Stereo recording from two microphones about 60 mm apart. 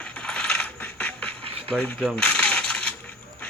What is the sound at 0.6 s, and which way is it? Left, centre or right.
Coin, left.